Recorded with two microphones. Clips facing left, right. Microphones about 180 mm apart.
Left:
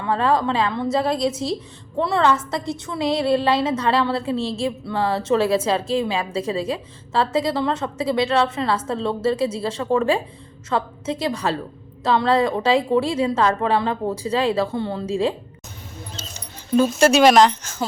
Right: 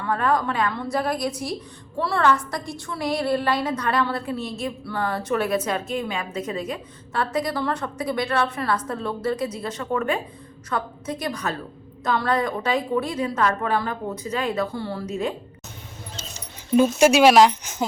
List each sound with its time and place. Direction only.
0.0 s a woman's voice: 25° left (ahead or behind)
16.7 s speech: 15° right (ahead or behind)